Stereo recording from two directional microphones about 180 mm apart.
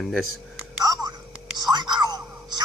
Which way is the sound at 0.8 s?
20° right (ahead or behind).